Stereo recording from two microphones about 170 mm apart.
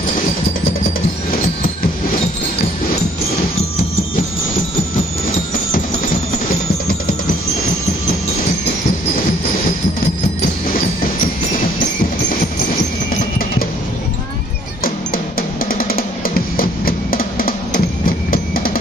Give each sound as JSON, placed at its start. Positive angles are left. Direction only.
{"t": 15.6, "sound": "music", "side_deg": 55}